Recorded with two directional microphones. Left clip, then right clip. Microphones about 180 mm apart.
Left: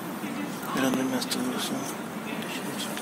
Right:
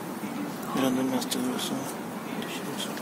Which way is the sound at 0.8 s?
10° right (ahead or behind).